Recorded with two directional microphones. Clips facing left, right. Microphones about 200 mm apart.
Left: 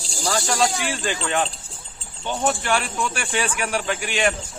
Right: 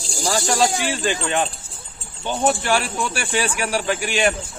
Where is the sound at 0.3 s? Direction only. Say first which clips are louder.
Right 2 dB; 30° right (ahead or behind).